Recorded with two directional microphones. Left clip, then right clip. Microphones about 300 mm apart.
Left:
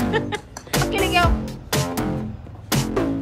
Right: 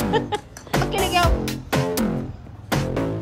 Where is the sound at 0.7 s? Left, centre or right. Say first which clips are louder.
Left 1 dB; centre.